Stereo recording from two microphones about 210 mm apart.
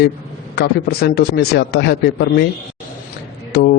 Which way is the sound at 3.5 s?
50° left (ahead or behind).